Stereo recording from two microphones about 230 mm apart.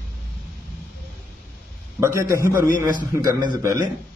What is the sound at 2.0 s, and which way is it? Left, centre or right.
A man's voice, centre.